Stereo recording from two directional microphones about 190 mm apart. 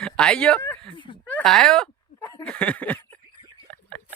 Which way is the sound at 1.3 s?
Centre (ahead or behind).